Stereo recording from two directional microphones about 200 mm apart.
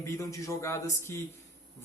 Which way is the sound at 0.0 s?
15° left (ahead or behind).